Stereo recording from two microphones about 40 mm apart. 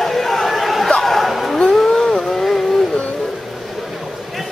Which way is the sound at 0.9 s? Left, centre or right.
Centre.